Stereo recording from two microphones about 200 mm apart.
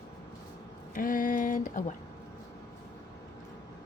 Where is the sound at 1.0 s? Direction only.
45° left (ahead or behind).